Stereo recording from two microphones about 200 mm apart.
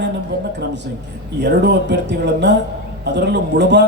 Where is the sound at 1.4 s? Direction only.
60° right (ahead or behind).